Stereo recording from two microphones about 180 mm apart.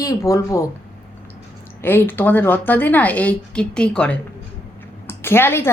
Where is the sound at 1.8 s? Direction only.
10° left (ahead or behind).